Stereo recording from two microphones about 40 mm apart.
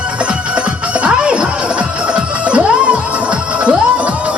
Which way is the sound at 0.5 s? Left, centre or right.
Right.